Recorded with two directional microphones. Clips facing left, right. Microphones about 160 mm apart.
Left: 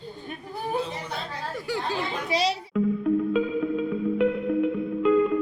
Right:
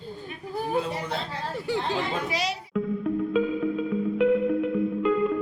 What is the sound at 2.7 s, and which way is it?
Music, centre (ahead or behind).